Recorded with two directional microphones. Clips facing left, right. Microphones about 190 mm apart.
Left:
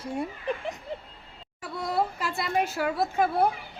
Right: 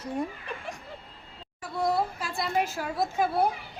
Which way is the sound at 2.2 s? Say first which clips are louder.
Left 1 dB; 65° left (ahead or behind).